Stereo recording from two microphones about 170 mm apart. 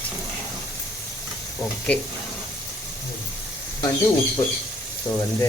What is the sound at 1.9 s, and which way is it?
Speech, 5° left (ahead or behind).